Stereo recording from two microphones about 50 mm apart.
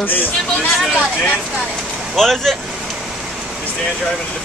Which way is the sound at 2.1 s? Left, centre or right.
Centre.